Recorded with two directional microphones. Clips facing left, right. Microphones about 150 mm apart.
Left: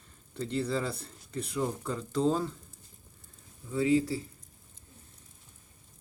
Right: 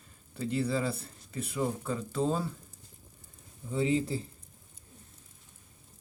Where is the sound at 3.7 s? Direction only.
20° right (ahead or behind).